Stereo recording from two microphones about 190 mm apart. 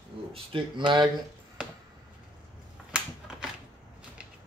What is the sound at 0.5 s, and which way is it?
Speech, 25° right (ahead or behind).